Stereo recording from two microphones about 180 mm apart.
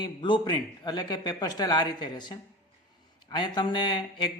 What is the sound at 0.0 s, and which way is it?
Speech, 25° left (ahead or behind).